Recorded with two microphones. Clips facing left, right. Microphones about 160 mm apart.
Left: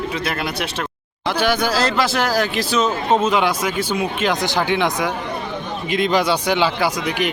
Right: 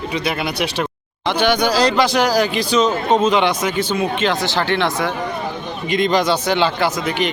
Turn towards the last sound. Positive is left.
turn(degrees=10)  # may be behind; listen again after turning